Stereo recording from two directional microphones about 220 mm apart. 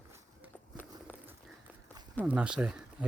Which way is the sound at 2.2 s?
5° right (ahead or behind).